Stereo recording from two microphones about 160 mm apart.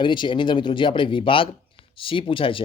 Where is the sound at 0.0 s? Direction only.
30° left (ahead or behind).